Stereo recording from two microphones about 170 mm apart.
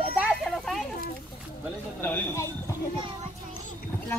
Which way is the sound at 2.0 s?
10° left (ahead or behind).